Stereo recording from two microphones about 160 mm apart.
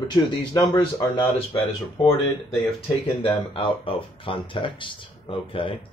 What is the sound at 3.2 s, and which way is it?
Speech, 35° left (ahead or behind).